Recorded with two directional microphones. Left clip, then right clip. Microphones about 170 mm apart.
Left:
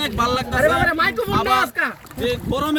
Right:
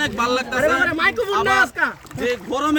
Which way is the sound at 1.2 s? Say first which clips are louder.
Right 2 dB; 10° right (ahead or behind).